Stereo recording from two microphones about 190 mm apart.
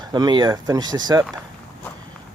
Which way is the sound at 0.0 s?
20° right (ahead or behind).